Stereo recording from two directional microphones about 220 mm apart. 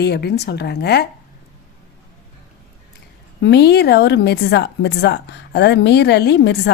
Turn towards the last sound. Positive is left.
turn(degrees=50)  # may be behind; listen again after turning